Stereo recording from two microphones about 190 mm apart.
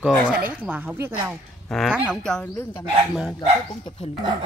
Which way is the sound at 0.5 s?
10° right (ahead or behind).